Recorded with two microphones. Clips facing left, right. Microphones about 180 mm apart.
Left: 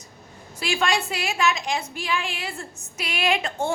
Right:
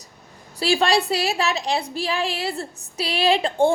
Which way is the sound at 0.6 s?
35° right (ahead or behind).